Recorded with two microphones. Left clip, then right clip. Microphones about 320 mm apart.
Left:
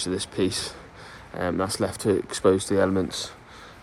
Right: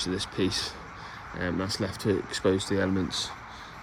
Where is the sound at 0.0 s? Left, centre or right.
Centre.